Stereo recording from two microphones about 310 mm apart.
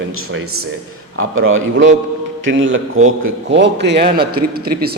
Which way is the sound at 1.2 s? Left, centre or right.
Right.